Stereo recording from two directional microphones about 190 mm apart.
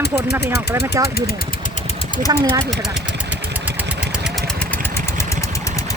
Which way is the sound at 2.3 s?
20° right (ahead or behind).